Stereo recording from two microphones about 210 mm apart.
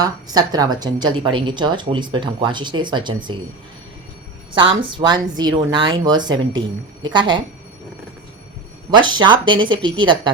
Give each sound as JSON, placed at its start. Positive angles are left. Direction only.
{"t": 0.0, "sound": "a woman's voice", "side_deg": -20}
{"t": 4.5, "sound": "a woman's voice", "side_deg": -25}
{"t": 9.1, "sound": "a woman's voice", "side_deg": -20}